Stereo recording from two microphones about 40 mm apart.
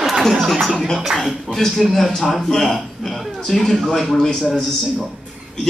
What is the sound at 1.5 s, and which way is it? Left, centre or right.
A man's voice, centre.